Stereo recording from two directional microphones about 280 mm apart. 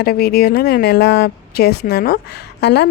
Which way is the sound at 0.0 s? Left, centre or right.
Left.